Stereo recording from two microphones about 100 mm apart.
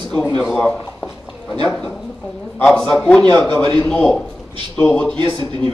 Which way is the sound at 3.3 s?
20° left (ahead or behind).